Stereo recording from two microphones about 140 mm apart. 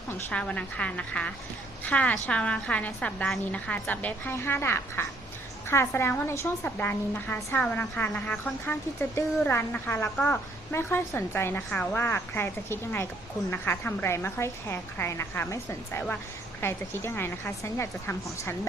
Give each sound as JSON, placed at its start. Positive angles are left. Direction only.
{"t": 0.1, "sound": "a woman's voice", "side_deg": 10}
{"t": 10.2, "sound": "a woman's voice", "side_deg": 5}
{"t": 10.7, "sound": "a woman's voice", "side_deg": 15}
{"t": 11.7, "sound": "a woman's voice", "side_deg": 5}
{"t": 11.9, "sound": "a woman's voice", "side_deg": 15}